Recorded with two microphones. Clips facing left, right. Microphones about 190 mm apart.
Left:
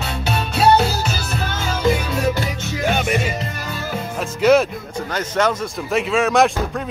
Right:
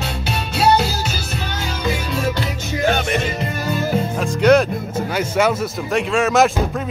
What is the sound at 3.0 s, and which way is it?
Music, 5° left (ahead or behind).